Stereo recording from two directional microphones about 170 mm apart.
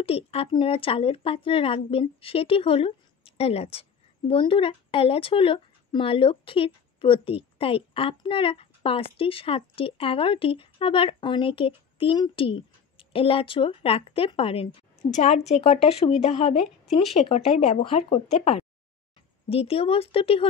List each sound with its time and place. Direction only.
0.0 s speech: 35° left (ahead or behind)
15.1 s speech: 45° left (ahead or behind)